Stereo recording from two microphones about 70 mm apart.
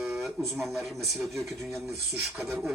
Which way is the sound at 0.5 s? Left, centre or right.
Centre.